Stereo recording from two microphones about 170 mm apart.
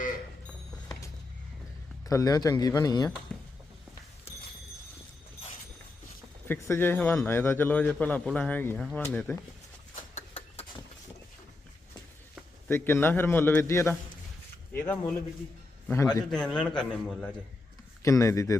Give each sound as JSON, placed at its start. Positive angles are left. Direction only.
{"t": 2.0, "sound": "speech", "side_deg": 20}
{"t": 3.3, "sound": "a sound", "side_deg": 10}
{"t": 6.5, "sound": "a man's voice", "side_deg": 15}
{"t": 9.9, "sound": "a sound", "side_deg": 40}
{"t": 12.6, "sound": "a man's voice", "side_deg": 15}
{"t": 16.3, "sound": "a man's voice", "side_deg": 5}
{"t": 18.0, "sound": "a man's voice", "side_deg": 15}